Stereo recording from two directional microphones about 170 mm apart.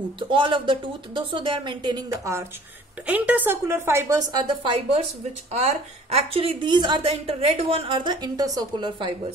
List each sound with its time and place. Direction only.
0.2 s a woman's voice: 30° right (ahead or behind)
5.5 s a woman's voice: 40° right (ahead or behind)